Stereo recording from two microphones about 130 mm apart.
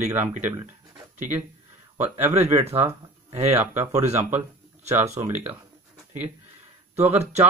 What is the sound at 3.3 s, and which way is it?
Speech, 55° right (ahead or behind).